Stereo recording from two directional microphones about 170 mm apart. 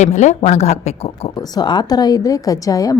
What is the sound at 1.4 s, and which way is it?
A woman's voice, 25° left (ahead or behind).